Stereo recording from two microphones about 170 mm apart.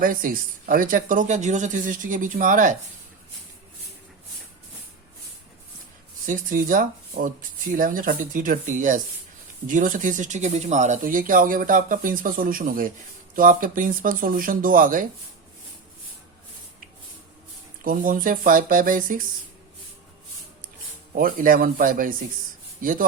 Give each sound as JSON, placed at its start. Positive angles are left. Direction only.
{"t": 0.0, "sound": "speech", "side_deg": -55}
{"t": 6.2, "sound": "speech", "side_deg": -50}
{"t": 17.8, "sound": "speech", "side_deg": -55}
{"t": 21.2, "sound": "speech", "side_deg": -55}